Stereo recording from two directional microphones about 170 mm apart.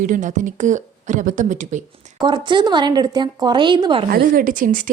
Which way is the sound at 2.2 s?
25° right (ahead or behind).